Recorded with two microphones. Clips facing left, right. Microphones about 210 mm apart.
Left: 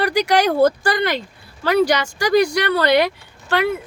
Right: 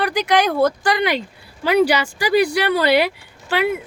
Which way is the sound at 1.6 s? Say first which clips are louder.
Right 1 dB; 10° right (ahead or behind).